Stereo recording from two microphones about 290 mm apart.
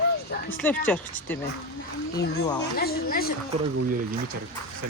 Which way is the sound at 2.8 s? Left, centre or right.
Left.